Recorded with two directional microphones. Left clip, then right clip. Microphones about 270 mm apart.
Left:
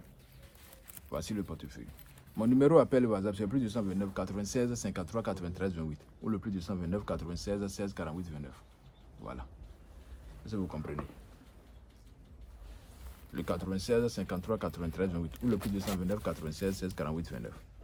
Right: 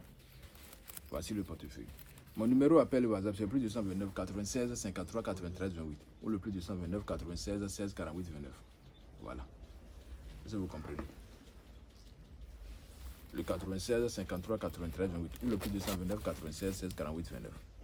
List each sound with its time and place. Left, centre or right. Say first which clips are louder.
1.1 s speech: left 3 dB; left
9.2 s a sound: left 3 dB; left
10.4 s speech: left 4 dB; left
13.3 s speech: left 3 dB; left
15.3 s speech: left 4 dB; centre
16.0 s speech: left 4 dB; left